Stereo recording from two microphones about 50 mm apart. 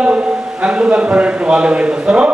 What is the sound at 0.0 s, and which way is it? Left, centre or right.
A man's voice, right.